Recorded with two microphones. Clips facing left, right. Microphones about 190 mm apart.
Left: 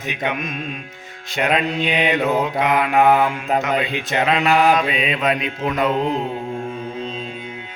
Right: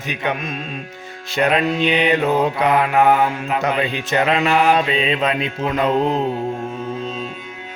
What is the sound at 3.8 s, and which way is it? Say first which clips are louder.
Mantra: right 2 dB; 40° right (ahead or behind).